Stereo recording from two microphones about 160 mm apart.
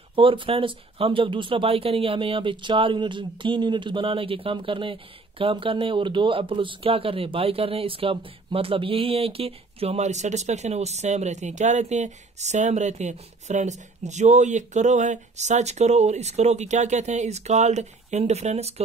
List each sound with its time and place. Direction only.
0.1 s speech: 35° right (ahead or behind)